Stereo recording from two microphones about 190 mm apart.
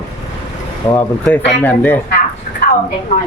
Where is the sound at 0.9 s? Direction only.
10° left (ahead or behind).